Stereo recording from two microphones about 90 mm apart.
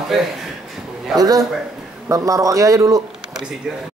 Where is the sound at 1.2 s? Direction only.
40° right (ahead or behind).